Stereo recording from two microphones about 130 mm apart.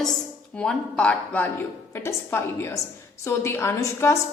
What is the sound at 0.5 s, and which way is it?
A woman's voice, 5° left (ahead or behind).